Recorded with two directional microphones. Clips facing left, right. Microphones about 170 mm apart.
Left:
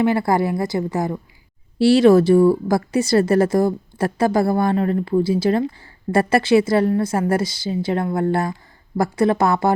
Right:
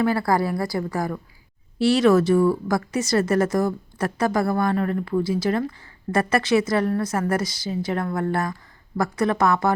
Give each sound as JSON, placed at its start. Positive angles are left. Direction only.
{"t": 0.0, "sound": "a woman's voice", "side_deg": 25}